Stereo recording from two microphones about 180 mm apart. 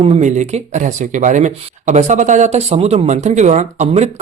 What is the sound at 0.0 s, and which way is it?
Speech, 40° right (ahead or behind).